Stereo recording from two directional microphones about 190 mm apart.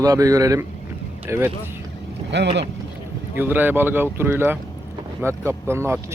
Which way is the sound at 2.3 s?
65° right (ahead or behind).